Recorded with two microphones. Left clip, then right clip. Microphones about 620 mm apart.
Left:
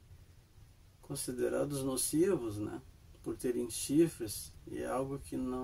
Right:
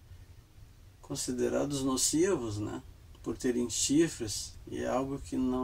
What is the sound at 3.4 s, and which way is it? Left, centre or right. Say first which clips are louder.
Speech: right 5 dB; left.